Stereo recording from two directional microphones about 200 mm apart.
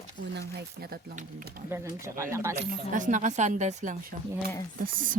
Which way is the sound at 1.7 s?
15° right (ahead or behind).